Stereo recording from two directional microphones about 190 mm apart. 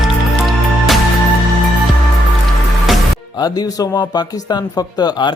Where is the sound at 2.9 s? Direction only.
Centre (ahead or behind).